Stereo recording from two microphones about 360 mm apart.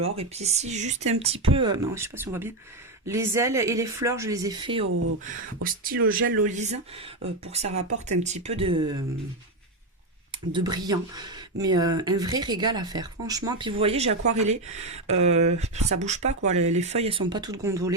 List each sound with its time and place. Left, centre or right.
0.0 s speech: centre
10.5 s speech: centre